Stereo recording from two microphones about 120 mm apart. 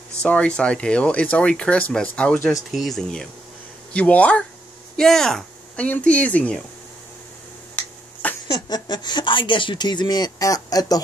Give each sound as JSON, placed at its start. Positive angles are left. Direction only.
{"t": 0.2, "sound": "speech", "side_deg": 10}
{"t": 7.7, "sound": "a sound", "side_deg": 10}
{"t": 8.5, "sound": "speech", "side_deg": 35}